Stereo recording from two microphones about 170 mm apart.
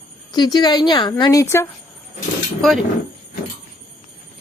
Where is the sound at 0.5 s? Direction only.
25° left (ahead or behind).